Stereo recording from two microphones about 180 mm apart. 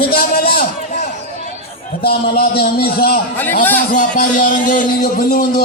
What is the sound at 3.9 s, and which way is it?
A man's voice, 45° left (ahead or behind).